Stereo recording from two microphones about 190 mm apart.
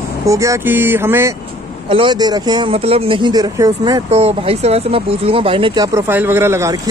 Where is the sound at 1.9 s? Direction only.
25° right (ahead or behind).